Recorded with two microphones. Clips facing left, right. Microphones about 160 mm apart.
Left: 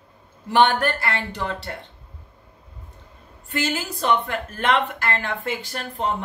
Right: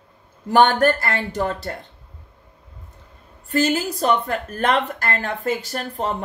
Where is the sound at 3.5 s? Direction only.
40° right (ahead or behind).